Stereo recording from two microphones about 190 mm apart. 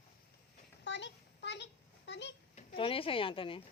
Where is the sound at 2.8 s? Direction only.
30° left (ahead or behind).